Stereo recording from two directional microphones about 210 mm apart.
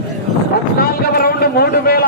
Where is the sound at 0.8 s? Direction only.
45° left (ahead or behind).